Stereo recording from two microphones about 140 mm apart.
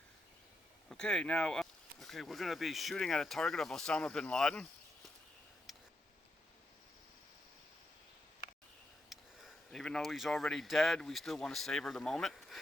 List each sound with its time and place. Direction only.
0.9 s speech: 5° left (ahead or behind)
5.7 s tick: centre (ahead or behind)
9.0 s a sound: centre (ahead or behind)
10.4 s speech: centre (ahead or behind)